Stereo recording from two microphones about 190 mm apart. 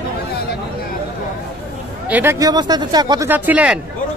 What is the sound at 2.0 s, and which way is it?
Speech, 10° right (ahead or behind).